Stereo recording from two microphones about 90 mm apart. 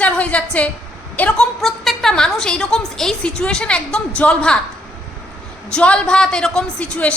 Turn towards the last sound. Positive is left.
turn(degrees=15)  # may be behind; listen again after turning